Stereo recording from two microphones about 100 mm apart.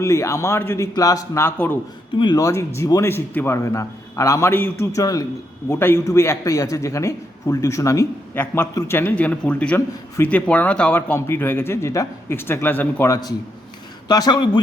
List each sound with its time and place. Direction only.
0.0 s a man's voice: 30° left (ahead or behind)
0.9 s a man's voice: 35° left (ahead or behind); by 1.8 s 20° left (ahead or behind)
2.1 s speech: 50° left (ahead or behind)
2.4 s a man's voice: 30° left (ahead or behind)
4.9 s a man's voice: 40° left (ahead or behind)
5.6 s a man's voice: 25° left (ahead or behind)
8.4 s a man's voice: 20° left (ahead or behind)
13.1 s speech: 40° left (ahead or behind)